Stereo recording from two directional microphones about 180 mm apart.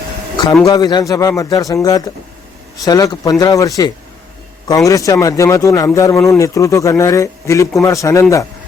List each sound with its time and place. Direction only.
0.6 s a man's voice: 20° left (ahead or behind)